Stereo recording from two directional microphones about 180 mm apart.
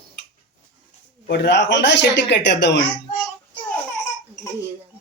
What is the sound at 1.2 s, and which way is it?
A woman's voice, 75° left (ahead or behind).